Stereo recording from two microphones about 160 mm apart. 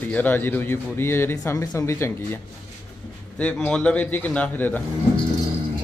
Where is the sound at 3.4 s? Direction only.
5° left (ahead or behind).